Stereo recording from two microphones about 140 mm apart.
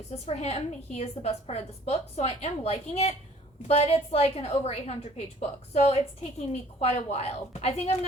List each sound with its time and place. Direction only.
0.3 s a woman's voice: 50° left (ahead or behind)